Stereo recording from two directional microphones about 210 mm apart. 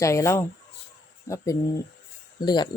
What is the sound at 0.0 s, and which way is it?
Speech, 15° left (ahead or behind).